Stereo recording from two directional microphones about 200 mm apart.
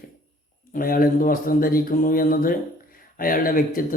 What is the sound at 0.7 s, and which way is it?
A man's voice, 45° left (ahead or behind).